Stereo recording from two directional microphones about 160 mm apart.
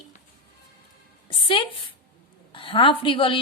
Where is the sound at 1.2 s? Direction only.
30° left (ahead or behind).